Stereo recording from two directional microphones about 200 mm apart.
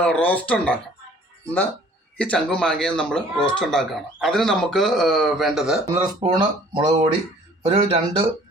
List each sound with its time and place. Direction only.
0.0 s speech: 5° left (ahead or behind)
2.1 s speech: 5° left (ahead or behind)
6.1 s speech: 25° right (ahead or behind)